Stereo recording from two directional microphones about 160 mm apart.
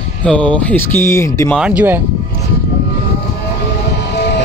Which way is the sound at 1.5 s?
5° right (ahead or behind).